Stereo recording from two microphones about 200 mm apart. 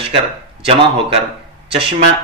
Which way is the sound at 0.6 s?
30° right (ahead or behind).